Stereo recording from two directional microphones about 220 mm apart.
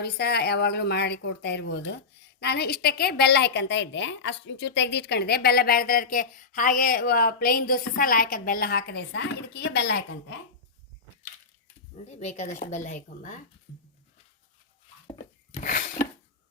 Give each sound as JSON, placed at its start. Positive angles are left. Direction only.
{"t": 0.0, "sound": "a woman's voice", "side_deg": 50}
{"t": 11.9, "sound": "speech", "side_deg": 30}
{"t": 15.6, "sound": "a sound", "side_deg": 40}